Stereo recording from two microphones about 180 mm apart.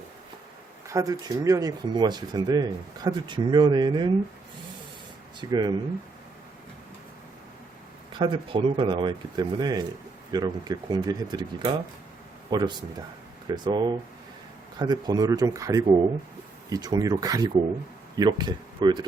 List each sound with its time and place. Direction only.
0.9 s speech: 20° right (ahead or behind)
5.4 s speech: 25° right (ahead or behind)
8.2 s speech: 30° right (ahead or behind)